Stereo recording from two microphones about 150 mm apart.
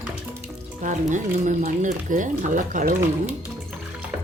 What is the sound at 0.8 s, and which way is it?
Speech, 55° right (ahead or behind).